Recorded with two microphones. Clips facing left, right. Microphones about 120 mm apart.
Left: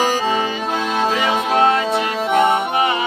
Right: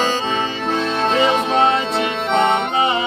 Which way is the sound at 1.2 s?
25° right (ahead or behind).